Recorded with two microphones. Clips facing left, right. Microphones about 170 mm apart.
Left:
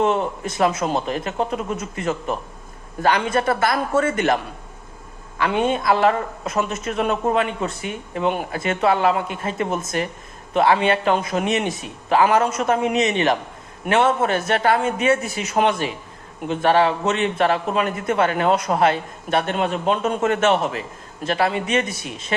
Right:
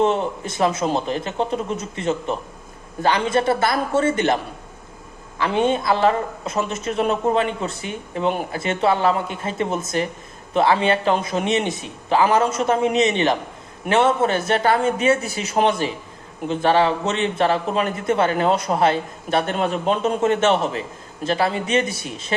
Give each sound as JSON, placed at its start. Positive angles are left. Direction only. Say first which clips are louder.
{"t": 0.0, "sound": "speech", "louder": "even", "side_deg": -30}
{"t": 5.4, "sound": "a man's voice", "louder": "right 1 dB", "side_deg": -30}